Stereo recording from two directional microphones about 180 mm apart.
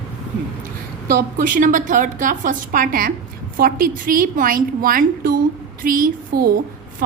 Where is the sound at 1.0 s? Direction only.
50° right (ahead or behind).